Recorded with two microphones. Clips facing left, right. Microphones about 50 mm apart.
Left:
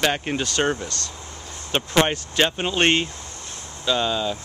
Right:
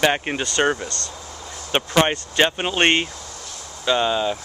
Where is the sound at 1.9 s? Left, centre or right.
Centre.